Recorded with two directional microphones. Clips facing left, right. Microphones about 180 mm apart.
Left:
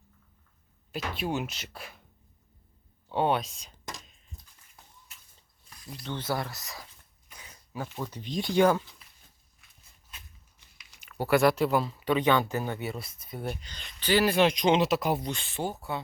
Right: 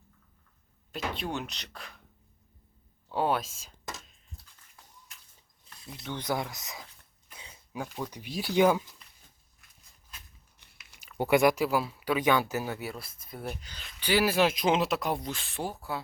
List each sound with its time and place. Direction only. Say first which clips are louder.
0.9 s speech: left 2 dB; 5° left (ahead or behind)
3.1 s a sound: left 2 dB; centre (ahead or behind)
6.1 s speech: even; 15° right (ahead or behind)
7.9 s speech: left 1 dB; centre (ahead or behind)
11.2 s speech: even; 15° right (ahead or behind); by 16.0 s centre (ahead or behind)